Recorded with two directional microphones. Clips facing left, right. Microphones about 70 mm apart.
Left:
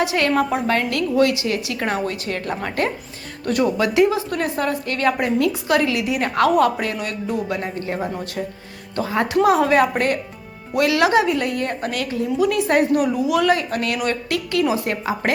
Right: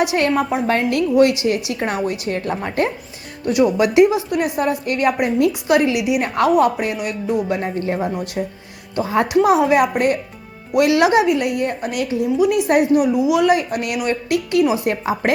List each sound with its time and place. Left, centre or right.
0.0 s a woman's voice: right
3.4 s speech: centre
3.8 s a woman's voice: right
6.3 s a woman's voice: right
6.7 s a woman's voice: centre
10.8 s a woman's voice: right; by 13.4 s centre
13.4 s a woman's voice: centre